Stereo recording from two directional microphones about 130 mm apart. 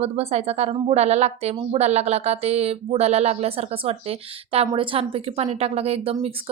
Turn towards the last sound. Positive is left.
turn(degrees=-50)  # may be behind; listen again after turning